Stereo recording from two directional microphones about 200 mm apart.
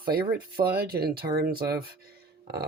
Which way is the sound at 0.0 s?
50° right (ahead or behind).